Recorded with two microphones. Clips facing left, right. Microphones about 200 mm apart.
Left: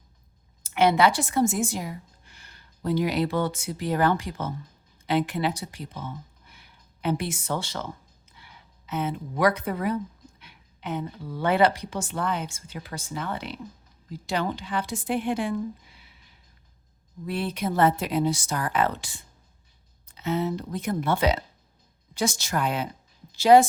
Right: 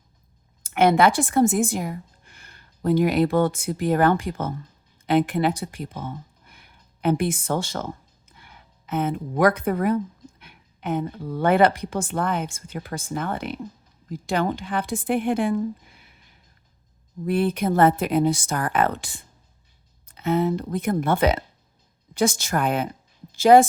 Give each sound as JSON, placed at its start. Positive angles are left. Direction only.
{"t": 0.6, "sound": "a woman's voice", "side_deg": -50}
{"t": 17.2, "sound": "a woman's voice", "side_deg": -50}